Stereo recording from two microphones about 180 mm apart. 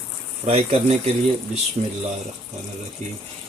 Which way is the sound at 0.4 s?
35° right (ahead or behind).